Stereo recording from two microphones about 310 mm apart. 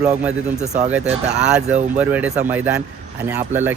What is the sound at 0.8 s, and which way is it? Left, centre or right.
Speech, centre.